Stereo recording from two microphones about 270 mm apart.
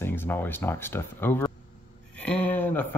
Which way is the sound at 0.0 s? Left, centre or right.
Centre.